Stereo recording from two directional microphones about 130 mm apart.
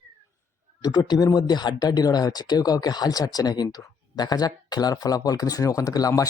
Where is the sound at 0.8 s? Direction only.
30° left (ahead or behind).